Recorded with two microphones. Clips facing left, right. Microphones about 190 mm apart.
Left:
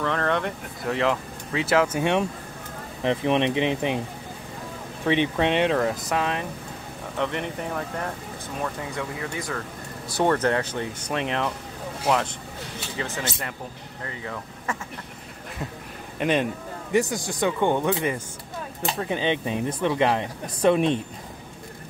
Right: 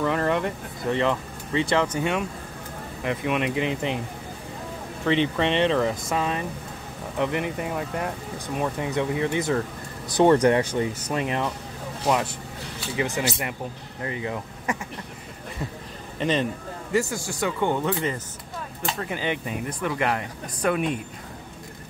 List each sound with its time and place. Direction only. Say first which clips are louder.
0.0 s speech: right 2 dB; 10° right (ahead or behind)
2.0 s speech: left 3 dB; 20° left (ahead or behind)
5.0 s speech: even; 15° left (ahead or behind)
5.8 s speech: even; centre (ahead or behind)
8.5 s speech: right 5 dB; 20° right (ahead or behind); by 11.5 s 5° right (ahead or behind)
12.9 s speech: right 5 dB; 15° right (ahead or behind)
16.2 s speech: left 1 dB; 10° left (ahead or behind); by 21.0 s 30° left (ahead or behind)